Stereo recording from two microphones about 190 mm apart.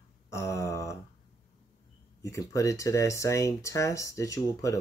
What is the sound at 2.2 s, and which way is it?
Speech, 15° left (ahead or behind).